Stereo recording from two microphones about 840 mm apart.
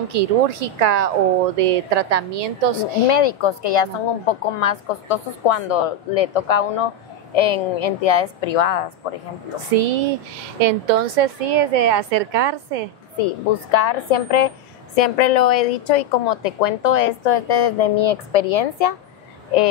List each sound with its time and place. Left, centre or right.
0.1 s a woman's voice: right
3.1 s a woman's voice: left
9.7 s a woman's voice: right
13.2 s a woman's voice: left